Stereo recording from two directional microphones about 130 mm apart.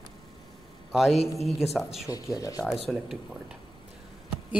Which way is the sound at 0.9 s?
5° right (ahead or behind).